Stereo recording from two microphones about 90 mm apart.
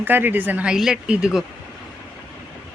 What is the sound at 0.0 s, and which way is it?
Speech, 20° right (ahead or behind).